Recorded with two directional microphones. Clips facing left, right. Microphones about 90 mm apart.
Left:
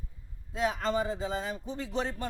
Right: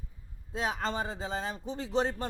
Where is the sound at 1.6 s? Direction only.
30° right (ahead or behind).